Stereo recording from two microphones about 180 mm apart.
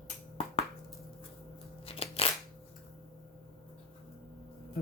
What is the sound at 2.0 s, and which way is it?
Crunch, 30° left (ahead or behind).